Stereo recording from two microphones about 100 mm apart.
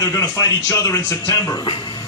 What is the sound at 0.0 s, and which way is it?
A man's voice, 30° left (ahead or behind).